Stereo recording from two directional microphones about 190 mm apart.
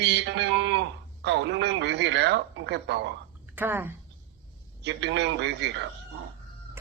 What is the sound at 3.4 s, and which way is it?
Speech, 10° right (ahead or behind).